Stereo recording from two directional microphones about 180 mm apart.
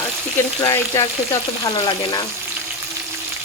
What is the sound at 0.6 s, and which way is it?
Speech, 20° left (ahead or behind).